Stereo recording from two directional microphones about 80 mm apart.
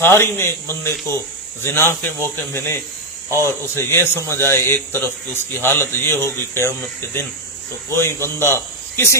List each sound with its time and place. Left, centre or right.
0.0 s a man's voice: left